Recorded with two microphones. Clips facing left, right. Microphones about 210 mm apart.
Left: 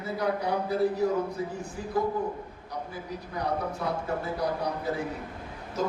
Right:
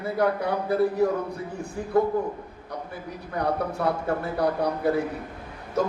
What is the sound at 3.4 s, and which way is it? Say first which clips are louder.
Speech: right 5 dB; 60° right (ahead or behind).